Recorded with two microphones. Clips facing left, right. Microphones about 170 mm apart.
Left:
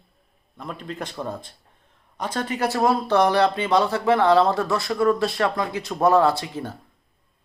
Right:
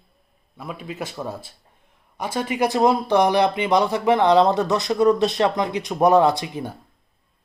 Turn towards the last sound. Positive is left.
turn(degrees=-15)  # may be behind; listen again after turning